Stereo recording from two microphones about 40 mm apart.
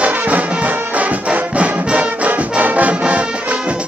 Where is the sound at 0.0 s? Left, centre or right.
Right.